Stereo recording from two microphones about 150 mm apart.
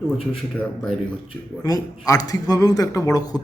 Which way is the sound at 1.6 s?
25° left (ahead or behind).